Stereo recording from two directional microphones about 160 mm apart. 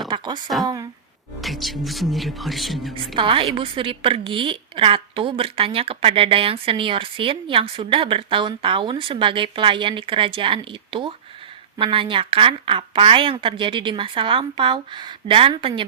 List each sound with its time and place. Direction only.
0.1 s a sound: 30° right (ahead or behind)
1.4 s speech: centre (ahead or behind)
3.2 s a woman's voice: 35° right (ahead or behind)